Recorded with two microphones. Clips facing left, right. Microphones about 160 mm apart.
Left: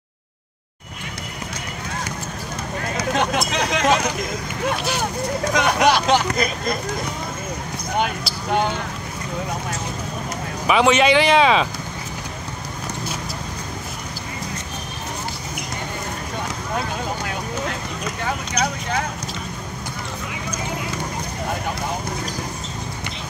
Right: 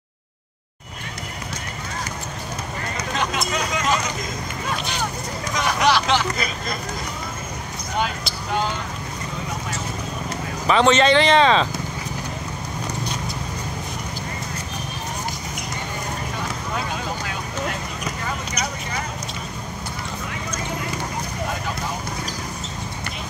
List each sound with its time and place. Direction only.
3.0 s speech: 75° left (ahead or behind)
5.4 s speech: 60° left (ahead or behind)
10.7 s speech: 10° left (ahead or behind)